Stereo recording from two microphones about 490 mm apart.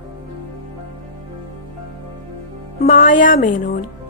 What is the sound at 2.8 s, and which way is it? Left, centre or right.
Speech, centre.